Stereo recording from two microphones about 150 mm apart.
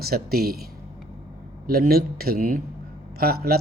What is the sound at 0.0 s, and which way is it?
Speech, 90° right.